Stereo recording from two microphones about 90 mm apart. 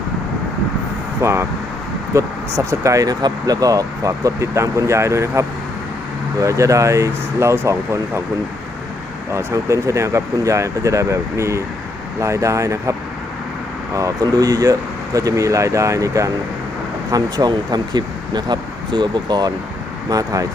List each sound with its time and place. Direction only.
1.2 s speech: 30° right (ahead or behind)
9.3 s speech: 30° right (ahead or behind)
13.9 s speech: 40° right (ahead or behind)
20.1 s speech: 40° right (ahead or behind)